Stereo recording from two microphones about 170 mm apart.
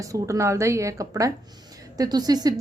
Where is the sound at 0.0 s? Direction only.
20° right (ahead or behind).